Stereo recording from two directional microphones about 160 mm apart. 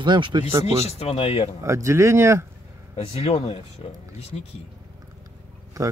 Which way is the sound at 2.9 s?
40° left (ahead or behind).